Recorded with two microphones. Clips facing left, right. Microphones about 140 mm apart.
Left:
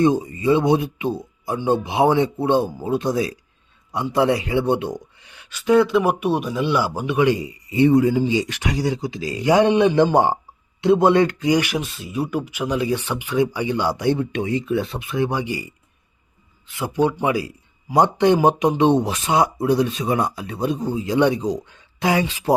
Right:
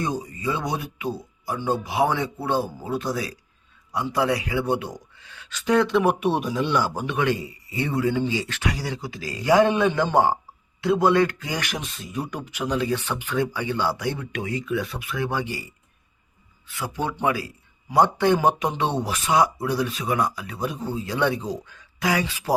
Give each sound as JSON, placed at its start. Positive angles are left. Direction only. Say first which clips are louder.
{"t": 0.0, "sound": "speech", "louder": "left 9 dB", "side_deg": 25}
{"t": 16.6, "sound": "speech", "louder": "left 8 dB", "side_deg": 20}